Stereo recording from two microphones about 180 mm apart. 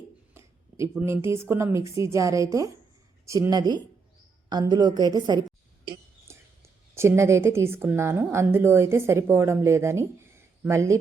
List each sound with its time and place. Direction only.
0.3 s a woman's voice: 15° right (ahead or behind)
6.3 s a sound: 15° right (ahead or behind)
6.9 s a woman's voice: 15° right (ahead or behind)